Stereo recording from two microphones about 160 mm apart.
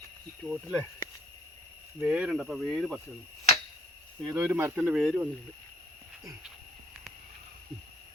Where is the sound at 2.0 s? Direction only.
5° right (ahead or behind).